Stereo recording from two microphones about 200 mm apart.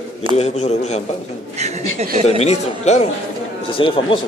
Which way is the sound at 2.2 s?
30° left (ahead or behind).